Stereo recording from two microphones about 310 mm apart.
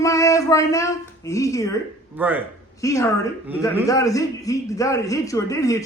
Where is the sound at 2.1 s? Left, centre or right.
Centre.